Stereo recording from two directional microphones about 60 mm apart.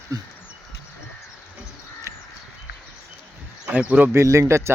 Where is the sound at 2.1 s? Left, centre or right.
Right.